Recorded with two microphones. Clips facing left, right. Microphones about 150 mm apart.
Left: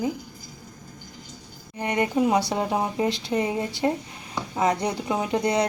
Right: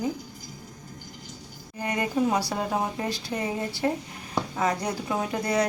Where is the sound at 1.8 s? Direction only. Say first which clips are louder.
Left 3 dB; 20° left (ahead or behind).